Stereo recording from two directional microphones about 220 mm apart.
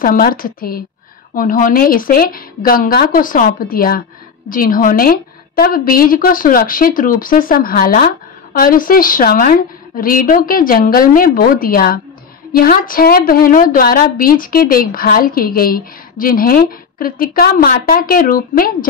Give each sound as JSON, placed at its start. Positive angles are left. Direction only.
{"t": 0.0, "sound": "a woman's voice", "side_deg": 40}